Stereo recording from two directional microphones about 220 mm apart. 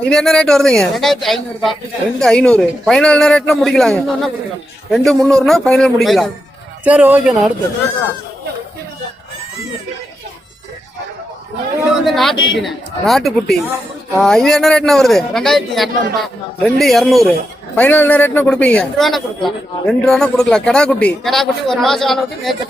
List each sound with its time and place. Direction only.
0.0 s speech: 5° left (ahead or behind)
12.0 s a man's voice: centre (ahead or behind)